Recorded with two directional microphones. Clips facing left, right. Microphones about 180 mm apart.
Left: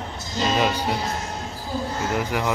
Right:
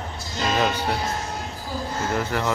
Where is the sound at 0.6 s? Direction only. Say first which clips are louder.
Right 1 dB; 5° left (ahead or behind).